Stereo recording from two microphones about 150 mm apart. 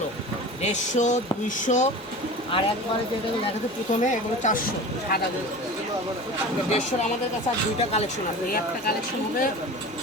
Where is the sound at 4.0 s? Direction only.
55° left (ahead or behind).